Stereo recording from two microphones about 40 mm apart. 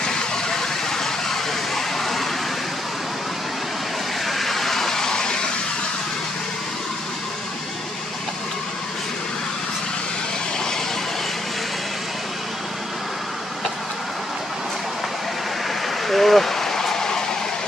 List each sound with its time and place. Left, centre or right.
0.6 s vehicle: centre
4.3 s vehicle: centre
16.1 s a sound: centre